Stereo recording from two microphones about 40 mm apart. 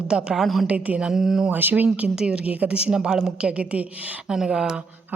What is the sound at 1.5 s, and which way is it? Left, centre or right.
Speech, right.